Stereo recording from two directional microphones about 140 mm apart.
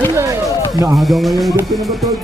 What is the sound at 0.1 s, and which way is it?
Music, 20° right (ahead or behind).